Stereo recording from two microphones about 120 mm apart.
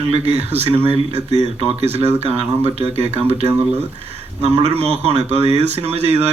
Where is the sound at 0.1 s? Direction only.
60° right (ahead or behind).